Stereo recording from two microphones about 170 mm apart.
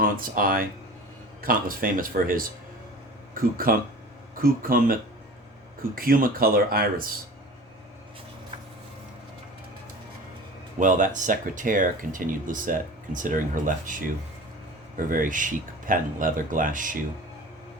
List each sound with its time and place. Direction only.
0.0 s speech: 55° right (ahead or behind)
10.8 s speech: 50° right (ahead or behind)
14.9 s speech: 55° right (ahead or behind)